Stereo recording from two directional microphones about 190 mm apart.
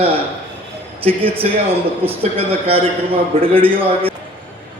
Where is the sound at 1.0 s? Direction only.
30° right (ahead or behind).